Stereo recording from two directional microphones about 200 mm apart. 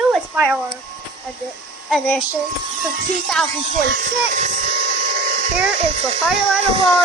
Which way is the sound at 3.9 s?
40° right (ahead or behind).